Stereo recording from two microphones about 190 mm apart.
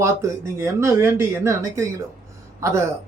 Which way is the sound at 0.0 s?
15° right (ahead or behind).